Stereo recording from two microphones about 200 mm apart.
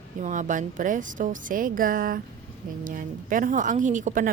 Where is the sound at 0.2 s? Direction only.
40° right (ahead or behind).